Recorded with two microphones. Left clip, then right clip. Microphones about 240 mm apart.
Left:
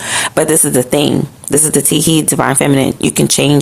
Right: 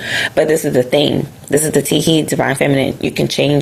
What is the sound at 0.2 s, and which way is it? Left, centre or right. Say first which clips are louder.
Speech: even; left.